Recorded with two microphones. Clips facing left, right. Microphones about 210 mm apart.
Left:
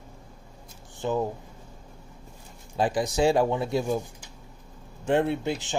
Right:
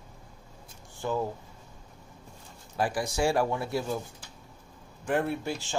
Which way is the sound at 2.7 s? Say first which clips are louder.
Left 4 dB; 20° left (ahead or behind).